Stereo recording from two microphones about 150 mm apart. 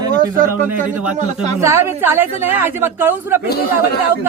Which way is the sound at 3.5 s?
90° left.